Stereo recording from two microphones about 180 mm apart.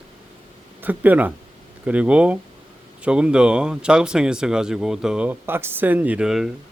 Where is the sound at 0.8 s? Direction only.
10° right (ahead or behind).